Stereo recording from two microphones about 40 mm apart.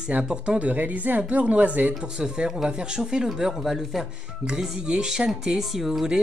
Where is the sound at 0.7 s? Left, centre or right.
Right.